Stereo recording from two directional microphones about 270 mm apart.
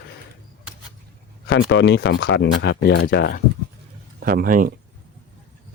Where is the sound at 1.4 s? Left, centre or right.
Left.